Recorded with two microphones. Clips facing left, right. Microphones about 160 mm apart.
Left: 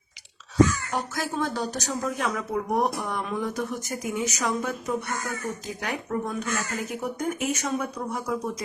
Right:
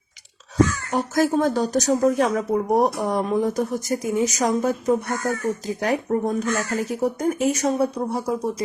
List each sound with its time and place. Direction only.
0.5 s speech: 45° right (ahead or behind)